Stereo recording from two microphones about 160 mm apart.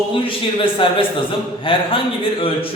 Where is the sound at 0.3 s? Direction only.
35° left (ahead or behind).